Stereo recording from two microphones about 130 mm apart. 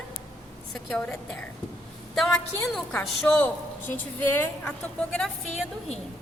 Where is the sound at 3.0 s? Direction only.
10° left (ahead or behind).